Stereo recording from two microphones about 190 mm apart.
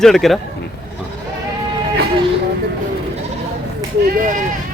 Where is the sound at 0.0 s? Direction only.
Centre (ahead or behind).